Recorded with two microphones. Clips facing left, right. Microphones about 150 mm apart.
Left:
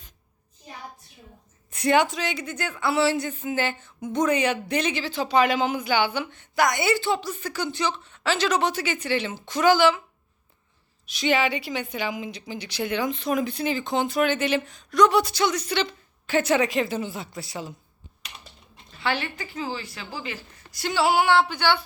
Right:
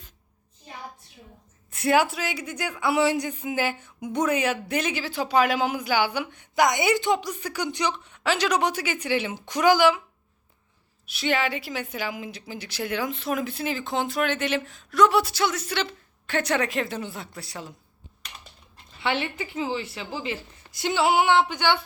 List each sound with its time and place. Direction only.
1.7 s speech: 5° right (ahead or behind)
11.0 s a woman's voice: 5° right (ahead or behind)
19.0 s a woman's voice: 20° right (ahead or behind)